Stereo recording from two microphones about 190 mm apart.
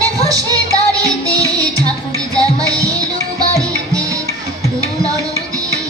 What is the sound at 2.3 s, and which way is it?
Music, 20° right (ahead or behind).